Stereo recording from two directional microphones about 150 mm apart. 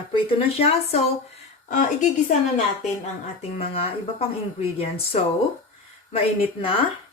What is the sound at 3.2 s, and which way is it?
Speech, 40° left (ahead or behind).